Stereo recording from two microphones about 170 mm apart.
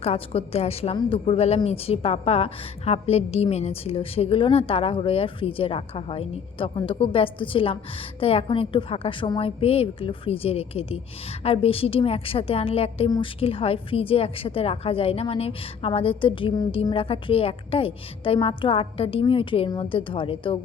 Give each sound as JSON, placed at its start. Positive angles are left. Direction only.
{"t": 0.0, "sound": "a woman's voice", "side_deg": 35}